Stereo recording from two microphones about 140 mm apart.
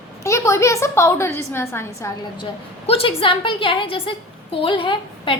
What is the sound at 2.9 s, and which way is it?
A woman's voice, 40° left (ahead or behind).